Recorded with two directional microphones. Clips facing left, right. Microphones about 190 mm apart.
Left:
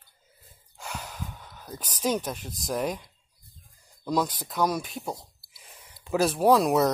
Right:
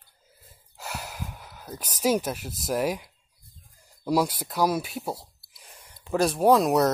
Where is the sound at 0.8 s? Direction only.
10° right (ahead or behind).